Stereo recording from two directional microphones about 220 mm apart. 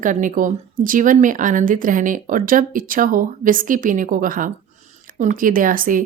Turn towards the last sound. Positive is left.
turn(degrees=-40)  # may be behind; listen again after turning